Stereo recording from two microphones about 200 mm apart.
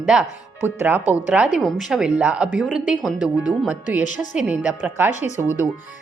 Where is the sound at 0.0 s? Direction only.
5° right (ahead or behind).